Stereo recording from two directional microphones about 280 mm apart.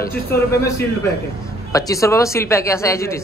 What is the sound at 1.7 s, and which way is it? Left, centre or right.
Speech, centre.